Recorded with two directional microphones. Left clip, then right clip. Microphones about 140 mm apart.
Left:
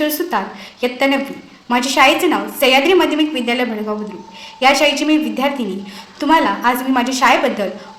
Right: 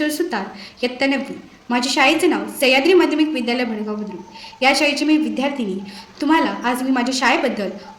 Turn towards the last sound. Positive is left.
turn(degrees=-30)  # may be behind; listen again after turning